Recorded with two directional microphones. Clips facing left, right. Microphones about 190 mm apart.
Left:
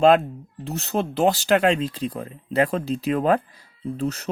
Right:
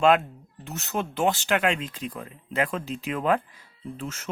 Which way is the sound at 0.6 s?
35° left (ahead or behind).